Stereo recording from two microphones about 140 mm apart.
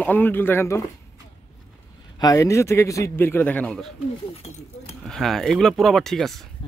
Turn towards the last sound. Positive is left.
turn(degrees=5)  # may be behind; listen again after turning